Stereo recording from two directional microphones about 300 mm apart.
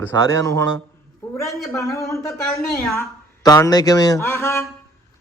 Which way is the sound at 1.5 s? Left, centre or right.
Centre.